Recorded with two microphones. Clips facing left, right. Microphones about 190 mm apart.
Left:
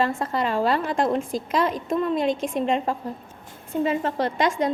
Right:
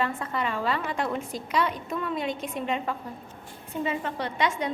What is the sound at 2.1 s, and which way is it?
Speech, 90° left.